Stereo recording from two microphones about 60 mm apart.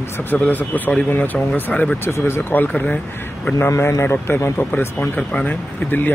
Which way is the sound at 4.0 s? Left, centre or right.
Left.